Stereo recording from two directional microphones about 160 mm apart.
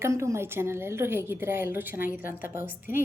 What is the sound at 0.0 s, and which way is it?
A woman's voice, 15° right (ahead or behind).